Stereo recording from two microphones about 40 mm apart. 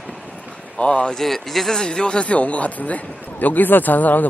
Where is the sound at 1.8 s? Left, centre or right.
Left.